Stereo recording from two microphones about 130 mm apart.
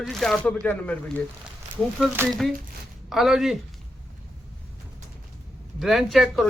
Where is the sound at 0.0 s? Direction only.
Centre (ahead or behind).